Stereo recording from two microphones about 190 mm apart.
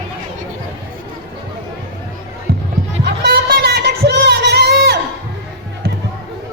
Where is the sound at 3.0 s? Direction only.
60° right (ahead or behind).